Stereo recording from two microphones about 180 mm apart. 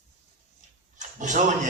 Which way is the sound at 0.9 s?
45° right (ahead or behind).